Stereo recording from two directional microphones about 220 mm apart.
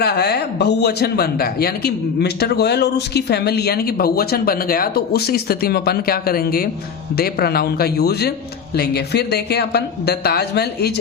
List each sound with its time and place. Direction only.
0.0 s speech: 45° left (ahead or behind)